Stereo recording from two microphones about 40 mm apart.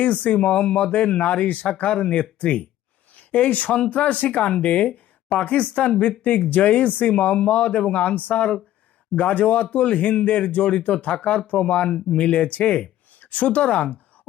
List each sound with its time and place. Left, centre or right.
0.0 s speech: left